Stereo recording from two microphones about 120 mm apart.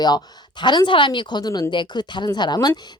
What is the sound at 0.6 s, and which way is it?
A woman's voice, 40° left (ahead or behind).